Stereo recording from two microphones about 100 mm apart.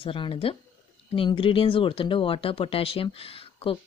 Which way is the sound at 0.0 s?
65° left (ahead or behind).